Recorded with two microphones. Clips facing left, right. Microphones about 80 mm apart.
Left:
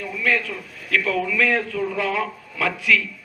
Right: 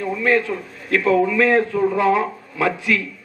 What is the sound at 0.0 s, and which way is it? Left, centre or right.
A man's voice, right.